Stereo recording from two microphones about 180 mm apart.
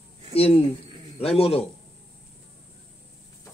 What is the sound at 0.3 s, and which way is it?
A man's voice, 30° left (ahead or behind).